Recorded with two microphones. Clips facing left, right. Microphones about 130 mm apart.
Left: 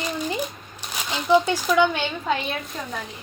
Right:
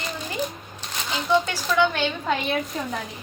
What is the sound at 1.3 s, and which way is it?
Speech, 15° left (ahead or behind).